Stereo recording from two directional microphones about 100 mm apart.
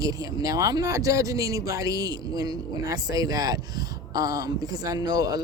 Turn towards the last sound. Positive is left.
turn(degrees=-40)  # may be behind; listen again after turning